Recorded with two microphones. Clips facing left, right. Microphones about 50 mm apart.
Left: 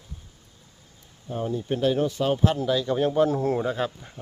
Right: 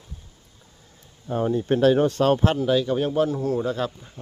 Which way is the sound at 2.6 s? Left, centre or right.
Centre.